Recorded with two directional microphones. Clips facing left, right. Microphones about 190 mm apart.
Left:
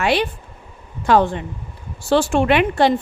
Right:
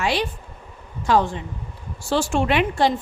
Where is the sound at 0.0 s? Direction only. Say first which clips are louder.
Left 4 dB; 60° left (ahead or behind).